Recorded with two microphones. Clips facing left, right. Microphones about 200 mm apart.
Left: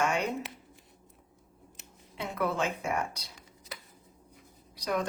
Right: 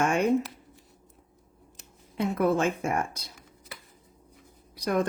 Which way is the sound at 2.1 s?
50° right (ahead or behind).